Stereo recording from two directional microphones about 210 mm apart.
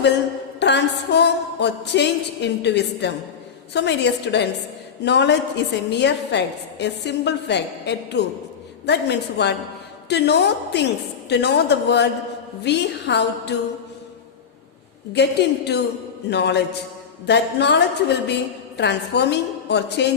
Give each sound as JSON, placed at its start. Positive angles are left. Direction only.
{"t": 0.6, "sound": "a woman's voice", "side_deg": 55}
{"t": 15.1, "sound": "a woman's voice", "side_deg": 55}